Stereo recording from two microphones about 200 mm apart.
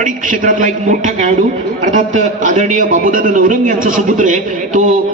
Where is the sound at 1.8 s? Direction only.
40° right (ahead or behind).